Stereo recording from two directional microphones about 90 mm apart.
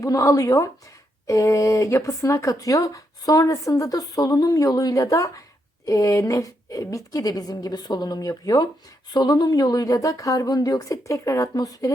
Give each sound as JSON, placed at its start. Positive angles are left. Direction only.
{"t": 0.0, "sound": "speech", "side_deg": 35}